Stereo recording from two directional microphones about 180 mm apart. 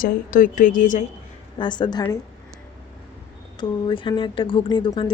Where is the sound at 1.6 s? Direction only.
25° left (ahead or behind).